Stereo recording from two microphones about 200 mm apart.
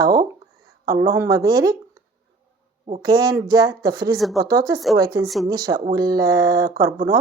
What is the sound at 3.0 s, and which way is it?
A woman's voice, 20° right (ahead or behind).